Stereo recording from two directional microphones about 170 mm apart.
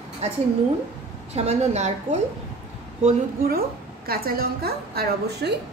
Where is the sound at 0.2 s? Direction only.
40° right (ahead or behind).